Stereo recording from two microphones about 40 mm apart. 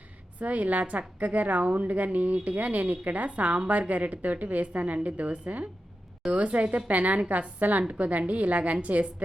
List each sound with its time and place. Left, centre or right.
0.3 s a woman's voice: right